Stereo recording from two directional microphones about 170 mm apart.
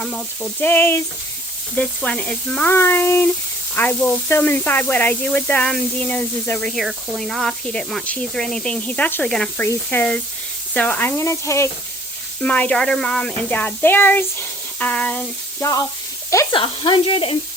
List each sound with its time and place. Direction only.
0.0 s speech: 5° left (ahead or behind)
16.6 s speech: 30° left (ahead or behind)